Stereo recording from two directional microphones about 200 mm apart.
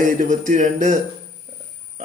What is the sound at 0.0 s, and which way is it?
Speech, 40° right (ahead or behind).